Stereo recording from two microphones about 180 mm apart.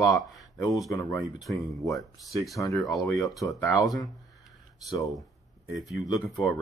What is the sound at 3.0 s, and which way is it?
Speech, 20° left (ahead or behind).